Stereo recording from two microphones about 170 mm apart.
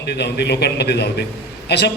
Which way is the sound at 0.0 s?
80° left.